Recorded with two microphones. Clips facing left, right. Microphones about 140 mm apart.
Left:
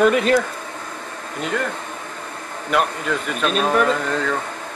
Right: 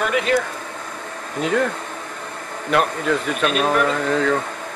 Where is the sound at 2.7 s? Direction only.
Centre (ahead or behind).